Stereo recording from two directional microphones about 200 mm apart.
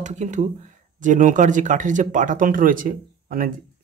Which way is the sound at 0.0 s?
35° right (ahead or behind).